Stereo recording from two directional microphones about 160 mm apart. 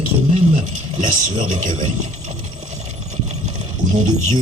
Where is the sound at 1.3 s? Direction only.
45° right (ahead or behind).